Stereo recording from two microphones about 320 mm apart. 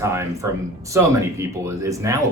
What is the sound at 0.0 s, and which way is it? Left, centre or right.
Speech, centre.